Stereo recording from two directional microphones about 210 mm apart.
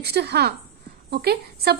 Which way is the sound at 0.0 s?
50° right (ahead or behind).